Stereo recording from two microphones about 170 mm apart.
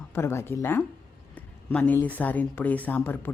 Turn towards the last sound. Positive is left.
turn(degrees=10)  # may be behind; listen again after turning